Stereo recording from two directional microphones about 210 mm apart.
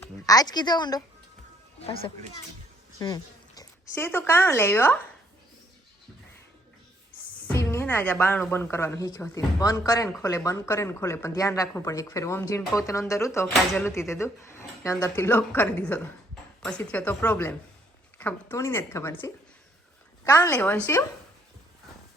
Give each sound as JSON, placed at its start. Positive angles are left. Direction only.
{"t": 0.0, "sound": "a woman's voice", "side_deg": 15}
{"t": 7.4, "sound": "a woman's voice", "side_deg": 15}